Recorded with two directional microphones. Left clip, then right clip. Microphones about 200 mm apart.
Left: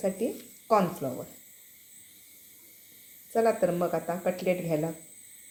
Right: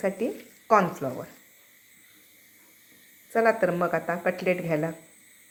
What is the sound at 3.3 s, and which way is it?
Speech, 10° right (ahead or behind).